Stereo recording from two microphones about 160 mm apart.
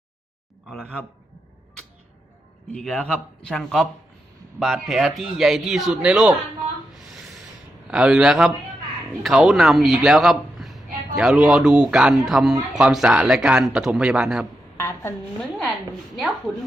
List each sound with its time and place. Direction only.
0.7 s a man's voice: 5° left (ahead or behind)
2.7 s a man's voice: 5° left (ahead or behind)
7.9 s a man's voice: 5° right (ahead or behind)
14.8 s a sound: 15° left (ahead or behind)